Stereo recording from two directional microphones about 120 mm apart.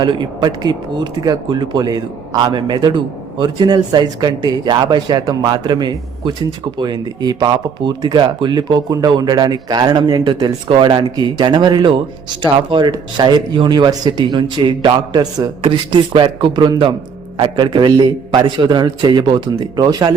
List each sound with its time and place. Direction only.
0.0 s a man's voice: 40° right (ahead or behind)